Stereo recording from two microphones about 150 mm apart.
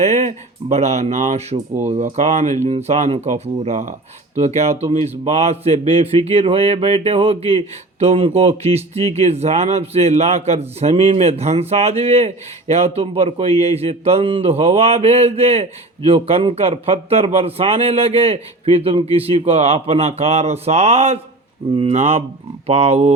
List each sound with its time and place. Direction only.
0.0 s a man's voice: 45° right (ahead or behind)